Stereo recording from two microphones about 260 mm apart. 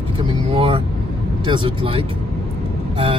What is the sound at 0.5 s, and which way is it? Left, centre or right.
Speech, right.